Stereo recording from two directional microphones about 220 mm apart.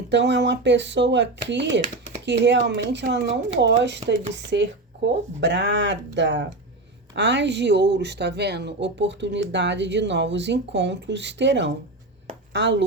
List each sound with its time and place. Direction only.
0.1 s speech: 55° right (ahead or behind)